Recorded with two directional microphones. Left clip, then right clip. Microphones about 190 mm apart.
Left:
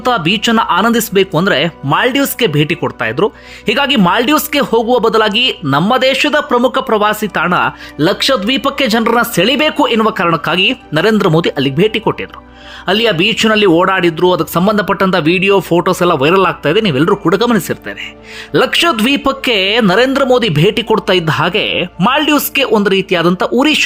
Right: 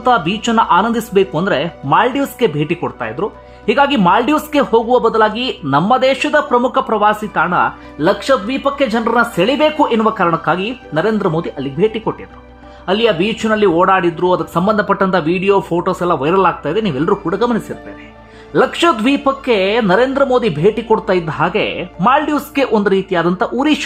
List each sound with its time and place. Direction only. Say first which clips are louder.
0.0 s speech: left 1 dB; 15° left (ahead or behind)